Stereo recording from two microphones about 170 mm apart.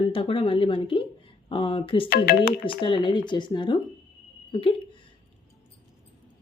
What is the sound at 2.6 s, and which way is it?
Speech, 30° left (ahead or behind).